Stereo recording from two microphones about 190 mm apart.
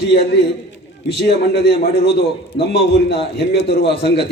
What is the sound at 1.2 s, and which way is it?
A man's voice, 60° left (ahead or behind).